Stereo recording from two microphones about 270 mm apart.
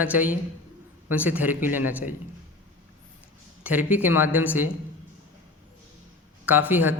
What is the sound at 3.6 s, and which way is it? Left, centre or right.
Speech, centre.